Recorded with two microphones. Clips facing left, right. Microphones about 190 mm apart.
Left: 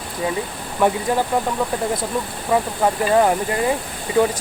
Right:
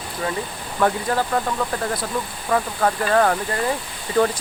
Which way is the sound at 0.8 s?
15° left (ahead or behind).